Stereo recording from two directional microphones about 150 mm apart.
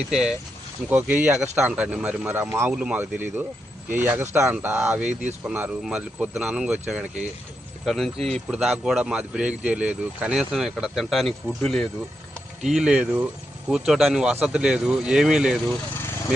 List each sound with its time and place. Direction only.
0.1 s speech: 5° right (ahead or behind)